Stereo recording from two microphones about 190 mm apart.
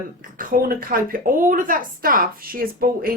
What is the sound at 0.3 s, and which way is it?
Speech, 50° right (ahead or behind).